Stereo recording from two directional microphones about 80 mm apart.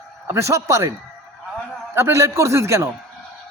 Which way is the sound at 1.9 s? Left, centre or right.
Right.